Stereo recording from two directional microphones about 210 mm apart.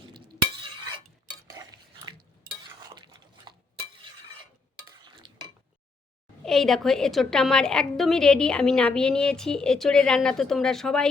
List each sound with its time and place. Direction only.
1.3 s stir: 20° right (ahead or behind)
2.6 s dishes: 20° right (ahead or behind)
6.4 s a woman's voice: centre (ahead or behind)